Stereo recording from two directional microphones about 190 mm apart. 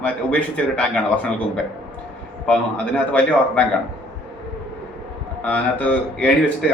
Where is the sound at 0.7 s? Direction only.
5° left (ahead or behind).